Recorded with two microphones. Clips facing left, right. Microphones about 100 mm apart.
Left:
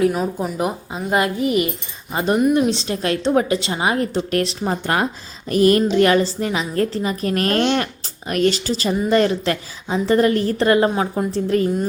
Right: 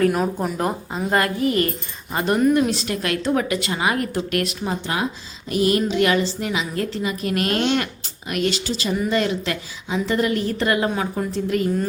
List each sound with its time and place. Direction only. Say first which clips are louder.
0.1 s speech: even; centre (ahead or behind)
1.1 s a woman's voice: left 2 dB; 20° left (ahead or behind)
4.7 s a woman's voice: left 5 dB; 55° left (ahead or behind); by 11.7 s 35° left (ahead or behind)